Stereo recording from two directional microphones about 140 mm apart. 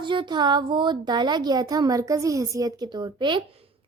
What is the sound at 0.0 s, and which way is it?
A child's voice, 35° right (ahead or behind).